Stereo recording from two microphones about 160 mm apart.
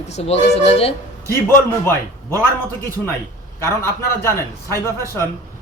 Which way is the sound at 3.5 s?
15° left (ahead or behind).